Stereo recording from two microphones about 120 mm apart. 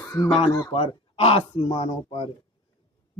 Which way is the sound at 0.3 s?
55° left (ahead or behind).